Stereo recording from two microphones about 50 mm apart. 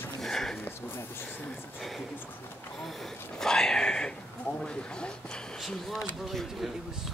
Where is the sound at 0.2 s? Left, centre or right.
Centre.